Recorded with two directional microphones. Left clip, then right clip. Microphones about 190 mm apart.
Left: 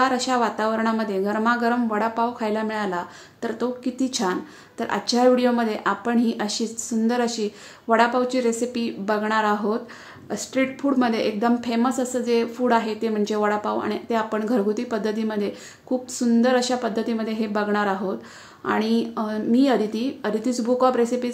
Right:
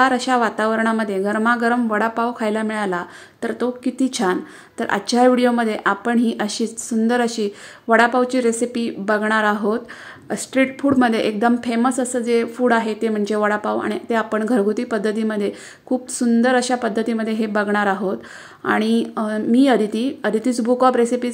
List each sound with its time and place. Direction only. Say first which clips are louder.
0.0 s a woman's voice: right 4 dB; 20° right (ahead or behind)